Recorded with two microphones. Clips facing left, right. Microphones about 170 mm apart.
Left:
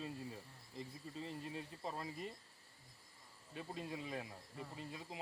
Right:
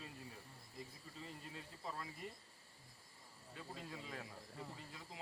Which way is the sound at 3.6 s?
20° left (ahead or behind).